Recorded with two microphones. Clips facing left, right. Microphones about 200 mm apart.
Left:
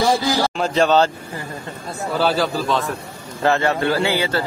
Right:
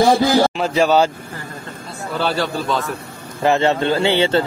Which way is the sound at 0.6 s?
5° right (ahead or behind).